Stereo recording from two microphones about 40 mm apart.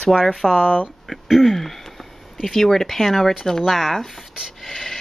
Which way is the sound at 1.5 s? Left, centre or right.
Centre.